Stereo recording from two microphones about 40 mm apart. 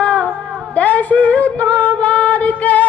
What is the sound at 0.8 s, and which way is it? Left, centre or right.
Singing, left.